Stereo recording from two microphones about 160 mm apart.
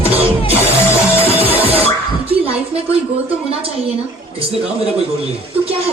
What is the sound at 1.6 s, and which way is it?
Music, 40° right (ahead or behind).